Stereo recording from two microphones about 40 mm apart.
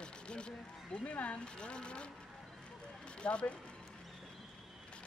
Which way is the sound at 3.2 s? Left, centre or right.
Left.